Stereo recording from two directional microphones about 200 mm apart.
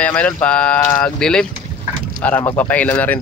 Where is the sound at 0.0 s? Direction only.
5° left (ahead or behind).